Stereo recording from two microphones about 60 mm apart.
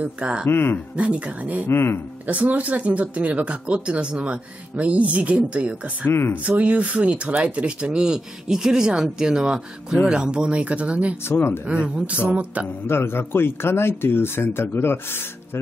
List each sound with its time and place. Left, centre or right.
0.0 s speech: right
0.5 s speech: left
0.9 s speech: right
1.7 s speech: left
2.2 s speech: right
6.0 s speech: left
6.4 s speech: right
11.2 s speech: left
11.6 s speech: centre
12.8 s speech: left